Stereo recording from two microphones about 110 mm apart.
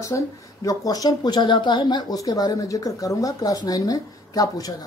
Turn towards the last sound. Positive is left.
turn(degrees=35)  # may be behind; listen again after turning